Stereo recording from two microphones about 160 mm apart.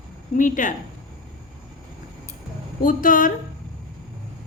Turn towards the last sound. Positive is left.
turn(degrees=60)  # may be behind; listen again after turning